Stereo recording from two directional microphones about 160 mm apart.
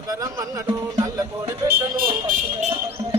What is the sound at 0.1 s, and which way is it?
Speech, 20° right (ahead or behind).